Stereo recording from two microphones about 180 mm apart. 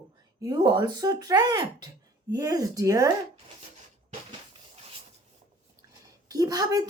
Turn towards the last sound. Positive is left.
turn(degrees=-20)  # may be behind; listen again after turning